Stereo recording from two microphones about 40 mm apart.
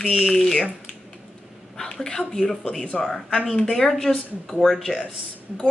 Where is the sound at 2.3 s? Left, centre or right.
Centre.